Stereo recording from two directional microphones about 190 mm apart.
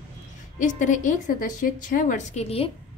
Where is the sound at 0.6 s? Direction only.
40° left (ahead or behind).